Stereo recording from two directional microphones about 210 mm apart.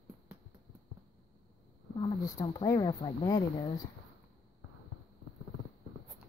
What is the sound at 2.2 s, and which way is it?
Speech, 15° left (ahead or behind).